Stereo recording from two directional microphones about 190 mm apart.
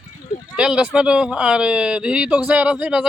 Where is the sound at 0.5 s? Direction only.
5° right (ahead or behind).